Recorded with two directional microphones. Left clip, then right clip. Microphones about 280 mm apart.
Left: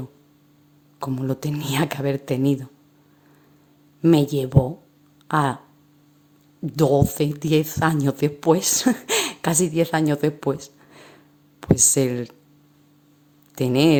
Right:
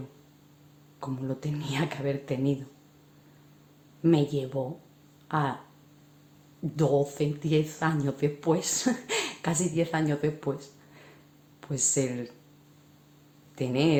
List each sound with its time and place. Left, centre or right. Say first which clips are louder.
0.9 s speech: left 8 dB; left
4.0 s speech: left 7 dB; left
6.7 s speech: left 7 dB; left
13.6 s speech: left 8 dB; left